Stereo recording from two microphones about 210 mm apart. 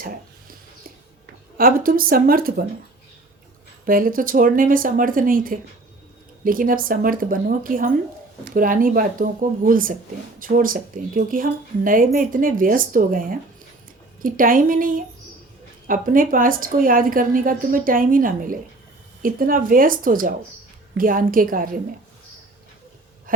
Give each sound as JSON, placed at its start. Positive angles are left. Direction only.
{"t": 0.0, "sound": "a sound", "side_deg": -40}
{"t": 1.5, "sound": "a woman's voice", "side_deg": -45}
{"t": 3.8, "sound": "a woman's voice", "side_deg": -40}